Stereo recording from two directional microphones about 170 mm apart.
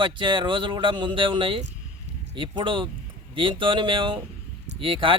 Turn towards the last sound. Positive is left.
turn(degrees=-30)  # may be behind; listen again after turning